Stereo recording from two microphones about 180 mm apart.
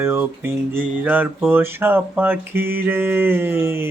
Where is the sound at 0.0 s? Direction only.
10° right (ahead or behind).